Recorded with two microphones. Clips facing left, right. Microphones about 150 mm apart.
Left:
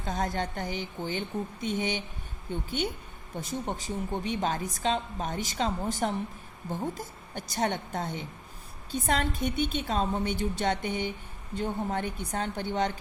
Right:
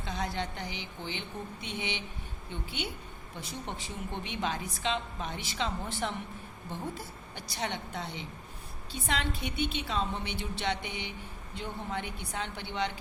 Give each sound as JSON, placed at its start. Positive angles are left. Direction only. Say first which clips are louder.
{"t": 0.0, "sound": "a woman's voice", "louder": "left 4 dB", "side_deg": 45}